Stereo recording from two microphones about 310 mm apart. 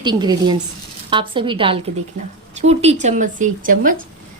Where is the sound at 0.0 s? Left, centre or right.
Centre.